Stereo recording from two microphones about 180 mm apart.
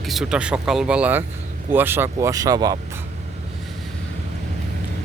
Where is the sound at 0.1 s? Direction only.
5° right (ahead or behind); by 2.7 s 20° right (ahead or behind).